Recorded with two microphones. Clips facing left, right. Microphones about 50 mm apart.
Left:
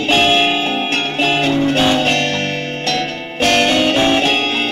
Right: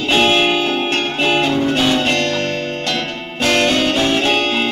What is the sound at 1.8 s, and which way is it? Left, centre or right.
Music, centre.